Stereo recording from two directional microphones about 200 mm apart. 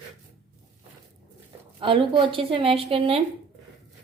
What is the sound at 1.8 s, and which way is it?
Speech, 25° right (ahead or behind).